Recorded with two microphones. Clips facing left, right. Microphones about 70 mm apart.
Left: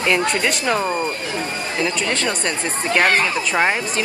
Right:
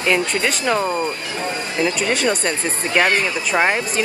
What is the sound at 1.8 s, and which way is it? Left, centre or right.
Speech, centre.